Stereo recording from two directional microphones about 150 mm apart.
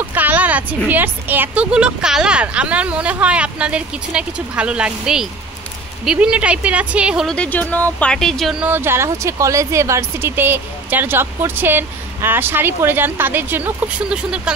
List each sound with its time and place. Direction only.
0.1 s speech: 10° right (ahead or behind)
7.3 s speech: 10° left (ahead or behind)
8.6 s speech: 15° right (ahead or behind)